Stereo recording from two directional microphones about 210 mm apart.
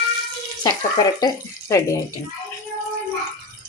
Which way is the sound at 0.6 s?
20° left (ahead or behind).